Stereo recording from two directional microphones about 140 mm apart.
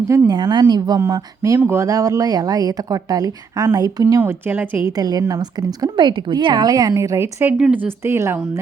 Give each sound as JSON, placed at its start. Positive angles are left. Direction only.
{"t": 0.3, "sound": "speech", "side_deg": -30}
{"t": 4.2, "sound": "speech", "side_deg": -15}
{"t": 4.9, "sound": "speech", "side_deg": -25}